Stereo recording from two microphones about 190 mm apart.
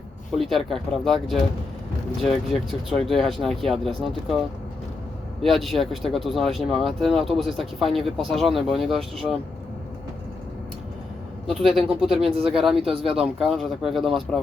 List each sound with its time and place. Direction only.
0.4 s speech: centre (ahead or behind)
11.4 s speech: centre (ahead or behind)
12.9 s speech: 30° right (ahead or behind)
13.1 s speech: centre (ahead or behind)